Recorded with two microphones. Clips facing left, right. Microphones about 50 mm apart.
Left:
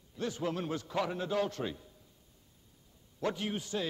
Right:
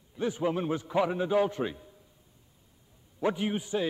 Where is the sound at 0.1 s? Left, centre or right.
Centre.